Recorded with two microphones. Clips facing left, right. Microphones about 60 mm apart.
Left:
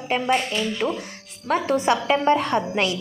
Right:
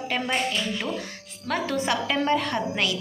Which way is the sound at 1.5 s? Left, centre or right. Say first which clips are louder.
Left 5 dB; left.